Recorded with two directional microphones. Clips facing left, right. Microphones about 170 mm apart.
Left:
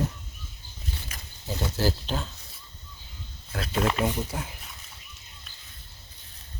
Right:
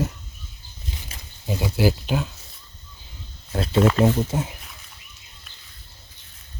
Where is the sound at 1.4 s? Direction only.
10° right (ahead or behind).